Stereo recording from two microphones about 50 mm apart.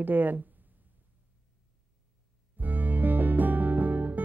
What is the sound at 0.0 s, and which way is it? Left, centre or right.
Speech, right.